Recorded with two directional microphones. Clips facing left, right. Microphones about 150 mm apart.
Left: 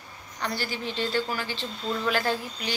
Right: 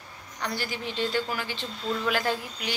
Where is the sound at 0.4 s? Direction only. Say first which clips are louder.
Left 1 dB; 15° right (ahead or behind).